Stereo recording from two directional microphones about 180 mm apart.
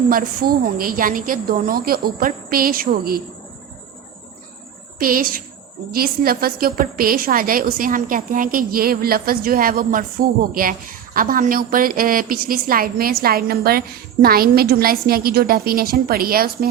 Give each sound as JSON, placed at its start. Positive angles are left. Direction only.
{"t": 0.1, "sound": "a woman's voice", "side_deg": -50}
{"t": 4.9, "sound": "a woman's voice", "side_deg": -55}